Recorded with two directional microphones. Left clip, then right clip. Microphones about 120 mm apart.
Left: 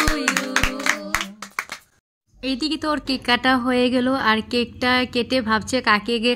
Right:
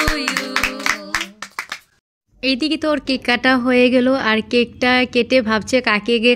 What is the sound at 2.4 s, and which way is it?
A woman's voice, 25° right (ahead or behind).